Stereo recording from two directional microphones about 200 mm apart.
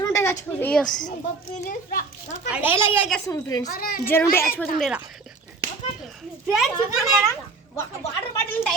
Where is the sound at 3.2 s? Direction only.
15° left (ahead or behind).